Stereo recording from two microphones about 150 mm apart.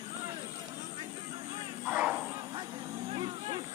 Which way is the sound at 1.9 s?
10° right (ahead or behind).